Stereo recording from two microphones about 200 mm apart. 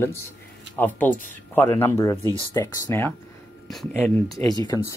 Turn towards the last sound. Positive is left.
turn(degrees=20)  # may be behind; listen again after turning